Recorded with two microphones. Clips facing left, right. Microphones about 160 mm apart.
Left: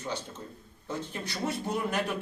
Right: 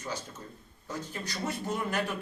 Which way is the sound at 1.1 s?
20° left (ahead or behind).